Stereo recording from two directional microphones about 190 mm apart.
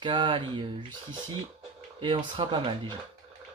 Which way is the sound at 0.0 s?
25° right (ahead or behind).